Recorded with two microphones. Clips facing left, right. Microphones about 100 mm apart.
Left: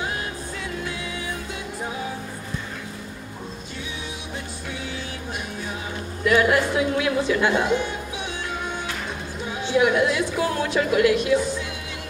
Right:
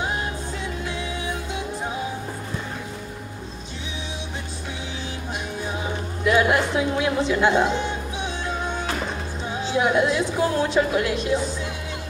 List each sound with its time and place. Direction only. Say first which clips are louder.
6.2 s a woman's voice: even; 25° right (ahead or behind)
9.6 s a woman's voice: left 1 dB; 30° right (ahead or behind)